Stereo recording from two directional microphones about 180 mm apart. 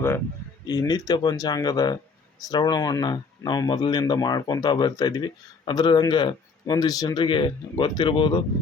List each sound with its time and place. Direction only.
0.6 s speech: 20° left (ahead or behind)